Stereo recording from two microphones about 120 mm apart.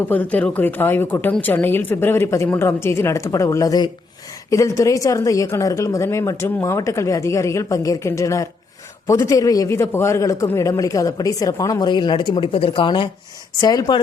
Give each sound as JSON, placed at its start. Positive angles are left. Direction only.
{"t": 0.1, "sound": "a man's voice", "side_deg": 15}
{"t": 13.6, "sound": "speech", "side_deg": 35}